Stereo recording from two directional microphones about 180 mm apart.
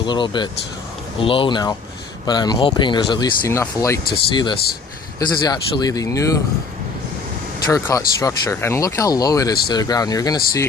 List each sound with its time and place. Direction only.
0.0 s speech: 25° left (ahead or behind)
7.7 s speech: 20° left (ahead or behind)